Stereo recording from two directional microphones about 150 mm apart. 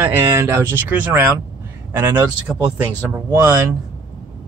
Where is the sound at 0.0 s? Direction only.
15° right (ahead or behind).